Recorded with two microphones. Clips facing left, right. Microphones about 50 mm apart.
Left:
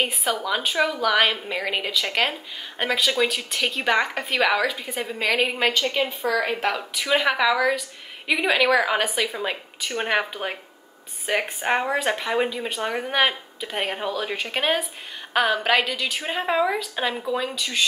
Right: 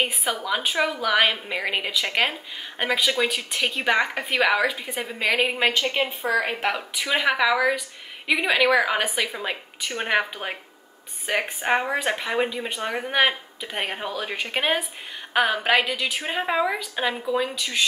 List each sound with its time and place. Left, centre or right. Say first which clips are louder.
0.0 s a woman's voice: left 1 dB; centre